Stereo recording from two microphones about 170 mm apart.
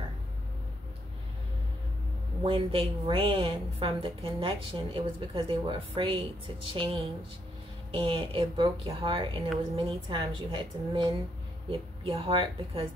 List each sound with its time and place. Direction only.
2.4 s a woman's voice: 35° right (ahead or behind)